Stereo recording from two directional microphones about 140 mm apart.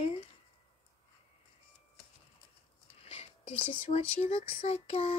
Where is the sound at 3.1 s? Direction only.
45° left (ahead or behind).